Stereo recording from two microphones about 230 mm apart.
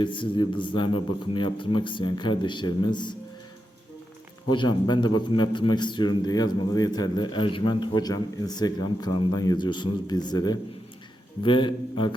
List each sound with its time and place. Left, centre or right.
0.0 s a man's voice: left
4.5 s a man's voice: centre